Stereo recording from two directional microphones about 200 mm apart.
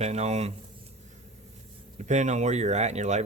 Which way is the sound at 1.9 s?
35° right (ahead or behind).